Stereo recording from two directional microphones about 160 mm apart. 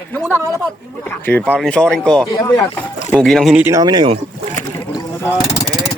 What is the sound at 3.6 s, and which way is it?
Speech, 20° right (ahead or behind).